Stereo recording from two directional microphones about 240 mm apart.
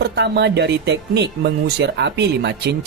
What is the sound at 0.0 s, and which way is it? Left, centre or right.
Speech, right.